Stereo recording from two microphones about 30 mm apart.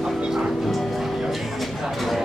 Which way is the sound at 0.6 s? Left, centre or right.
Centre.